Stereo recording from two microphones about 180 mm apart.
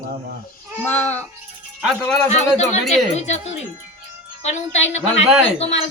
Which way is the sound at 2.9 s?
40° left (ahead or behind).